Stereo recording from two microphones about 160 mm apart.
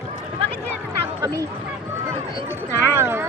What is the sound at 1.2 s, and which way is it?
Speech, 20° right (ahead or behind).